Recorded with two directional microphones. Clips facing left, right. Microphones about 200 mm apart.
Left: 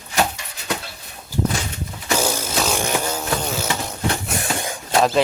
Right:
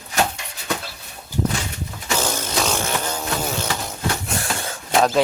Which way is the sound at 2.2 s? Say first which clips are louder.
Left 1 dB; 10° left (ahead or behind).